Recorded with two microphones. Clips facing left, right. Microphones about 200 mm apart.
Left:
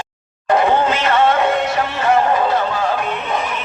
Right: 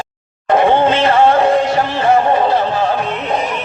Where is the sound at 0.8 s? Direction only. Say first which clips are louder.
Right 4 dB; 30° right (ahead or behind).